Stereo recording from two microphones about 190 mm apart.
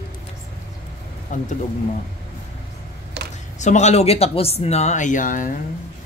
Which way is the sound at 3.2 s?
60° right (ahead or behind).